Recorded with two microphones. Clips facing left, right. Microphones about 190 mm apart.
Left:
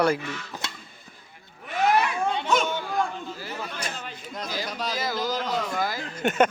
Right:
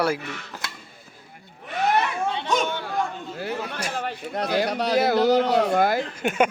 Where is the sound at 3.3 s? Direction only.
60° right (ahead or behind).